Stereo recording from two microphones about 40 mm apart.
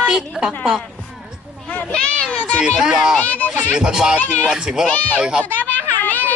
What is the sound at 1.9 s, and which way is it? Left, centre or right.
Speech, left.